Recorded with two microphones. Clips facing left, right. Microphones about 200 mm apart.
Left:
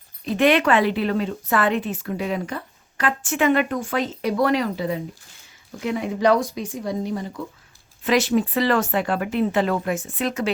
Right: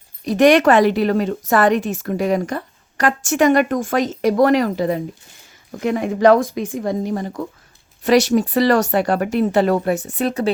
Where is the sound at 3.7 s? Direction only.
90° right.